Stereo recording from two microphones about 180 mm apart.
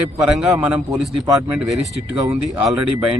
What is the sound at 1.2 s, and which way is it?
Speech, 20° right (ahead or behind).